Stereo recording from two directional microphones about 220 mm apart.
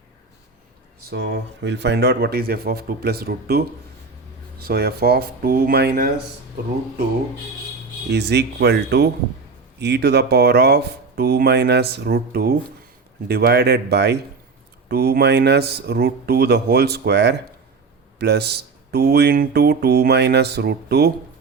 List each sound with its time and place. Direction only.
1.1 s speech: 55° right (ahead or behind)
4.6 s speech: 45° right (ahead or behind)
8.1 s speech: 50° right (ahead or behind)